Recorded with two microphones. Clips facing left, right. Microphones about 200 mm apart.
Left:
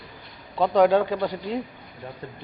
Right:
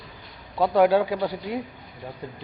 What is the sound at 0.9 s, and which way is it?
Speech, 15° right (ahead or behind).